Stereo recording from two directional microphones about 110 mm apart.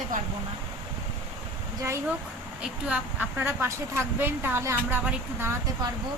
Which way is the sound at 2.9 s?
20° right (ahead or behind).